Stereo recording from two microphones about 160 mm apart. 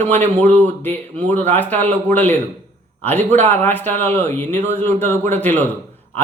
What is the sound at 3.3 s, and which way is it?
Speech, 45° right (ahead or behind).